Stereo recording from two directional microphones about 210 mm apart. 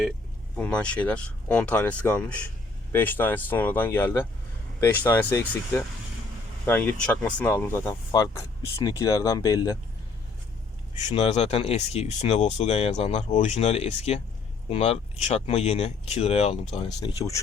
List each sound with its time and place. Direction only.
0.5 s speech: 5° left (ahead or behind)
11.1 s speech: 30° left (ahead or behind)
17.0 s speech: 15° left (ahead or behind)